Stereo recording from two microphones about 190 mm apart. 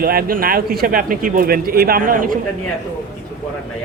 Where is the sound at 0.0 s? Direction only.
50° right (ahead or behind).